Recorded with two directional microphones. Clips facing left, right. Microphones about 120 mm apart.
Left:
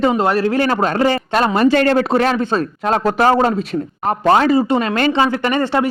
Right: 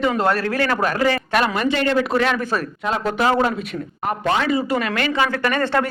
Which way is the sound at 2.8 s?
45° left (ahead or behind).